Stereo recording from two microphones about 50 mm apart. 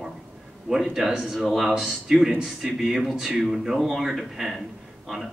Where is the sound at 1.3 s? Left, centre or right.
Centre.